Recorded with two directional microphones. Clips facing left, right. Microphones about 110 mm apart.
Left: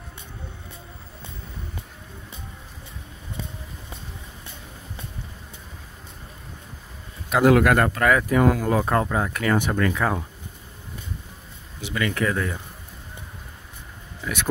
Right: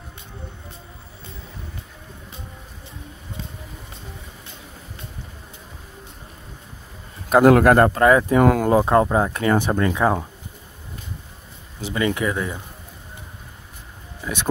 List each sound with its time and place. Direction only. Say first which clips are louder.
7.2 s speech: right 4 dB; 45° right (ahead or behind); by 8.4 s 25° right (ahead or behind)
8.4 s speech: right 3 dB; 60° right (ahead or behind)
8.6 s speech: right 5 dB; 25° right (ahead or behind)
11.8 s speech: right 3 dB; 25° right (ahead or behind)
14.2 s speech: right 1 dB; 20° right (ahead or behind)